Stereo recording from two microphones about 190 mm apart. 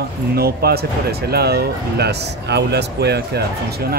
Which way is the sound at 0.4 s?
55° right (ahead or behind).